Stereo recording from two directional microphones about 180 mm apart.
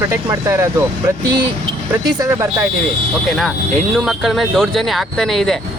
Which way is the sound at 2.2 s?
15° right (ahead or behind).